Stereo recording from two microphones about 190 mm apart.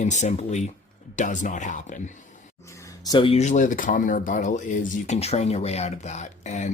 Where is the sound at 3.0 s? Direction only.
25° left (ahead or behind).